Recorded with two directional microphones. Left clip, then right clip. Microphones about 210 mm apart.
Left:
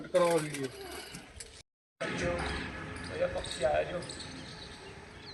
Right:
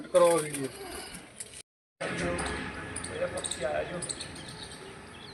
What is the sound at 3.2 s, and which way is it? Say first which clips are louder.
Basketball bounce: left 2 dB; 45° left (ahead or behind).